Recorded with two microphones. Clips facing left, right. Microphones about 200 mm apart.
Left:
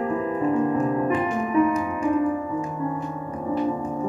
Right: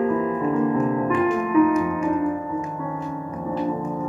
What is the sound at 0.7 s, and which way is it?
Music, 30° left (ahead or behind).